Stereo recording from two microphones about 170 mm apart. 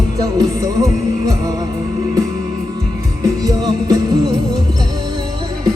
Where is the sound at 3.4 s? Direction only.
20° right (ahead or behind).